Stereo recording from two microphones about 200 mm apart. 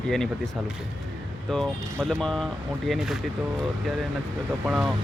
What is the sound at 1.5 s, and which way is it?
Speech, centre (ahead or behind).